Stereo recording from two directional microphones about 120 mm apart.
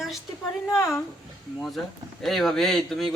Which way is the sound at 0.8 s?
20° left (ahead or behind).